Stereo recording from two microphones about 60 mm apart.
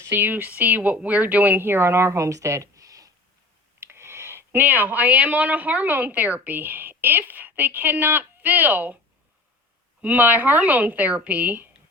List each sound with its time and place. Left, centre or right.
0.0 s speech: right
3.8 s speech: right
10.0 s speech: right